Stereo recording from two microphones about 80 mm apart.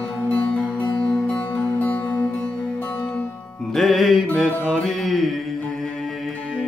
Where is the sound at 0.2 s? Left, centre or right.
Centre.